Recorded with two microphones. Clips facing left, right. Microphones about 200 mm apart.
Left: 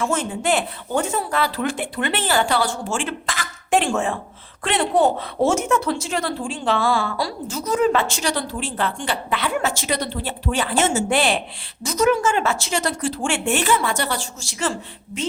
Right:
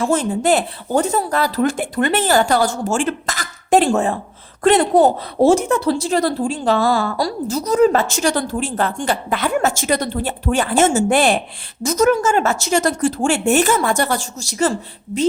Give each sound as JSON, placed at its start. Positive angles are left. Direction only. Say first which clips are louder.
{"t": 0.0, "sound": "a woman's voice", "louder": "right 5 dB", "side_deg": -35}